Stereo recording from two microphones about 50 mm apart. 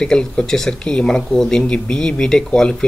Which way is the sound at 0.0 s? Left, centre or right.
Centre.